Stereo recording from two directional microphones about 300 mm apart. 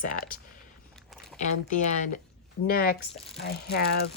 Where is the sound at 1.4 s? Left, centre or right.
Left.